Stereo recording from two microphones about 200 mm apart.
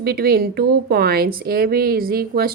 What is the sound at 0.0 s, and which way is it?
Speech, 50° right (ahead or behind).